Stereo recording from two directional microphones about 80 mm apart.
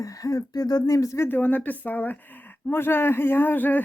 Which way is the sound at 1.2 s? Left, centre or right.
Left.